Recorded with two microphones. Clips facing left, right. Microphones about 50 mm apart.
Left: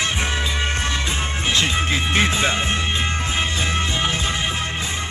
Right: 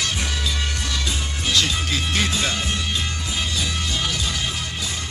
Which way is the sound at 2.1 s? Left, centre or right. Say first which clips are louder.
Left 5 dB; left.